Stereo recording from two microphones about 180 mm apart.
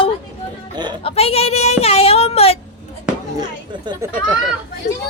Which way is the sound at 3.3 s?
25° right (ahead or behind).